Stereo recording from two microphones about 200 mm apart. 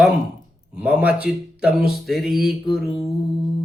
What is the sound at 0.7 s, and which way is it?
Speech, 5° right (ahead or behind).